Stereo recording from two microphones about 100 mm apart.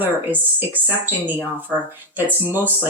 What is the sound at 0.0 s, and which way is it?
Speech, 20° right (ahead or behind).